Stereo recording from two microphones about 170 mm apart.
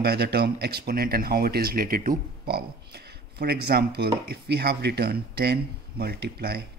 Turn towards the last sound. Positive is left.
turn(degrees=-65)  # may be behind; listen again after turning